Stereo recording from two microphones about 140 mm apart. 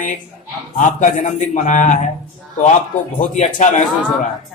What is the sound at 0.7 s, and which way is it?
A man's voice, 65° left (ahead or behind).